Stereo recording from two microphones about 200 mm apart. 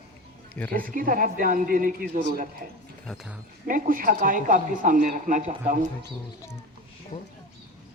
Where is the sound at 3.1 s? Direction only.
5° left (ahead or behind).